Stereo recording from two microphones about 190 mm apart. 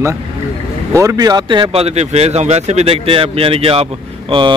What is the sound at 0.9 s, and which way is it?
A man's voice, 15° right (ahead or behind).